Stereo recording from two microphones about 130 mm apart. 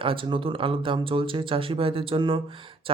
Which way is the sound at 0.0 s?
40° right (ahead or behind).